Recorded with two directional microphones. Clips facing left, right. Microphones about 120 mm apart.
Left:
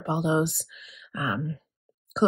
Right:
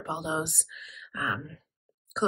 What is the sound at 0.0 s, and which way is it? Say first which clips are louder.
Speech: left 7 dB; 25° left (ahead or behind).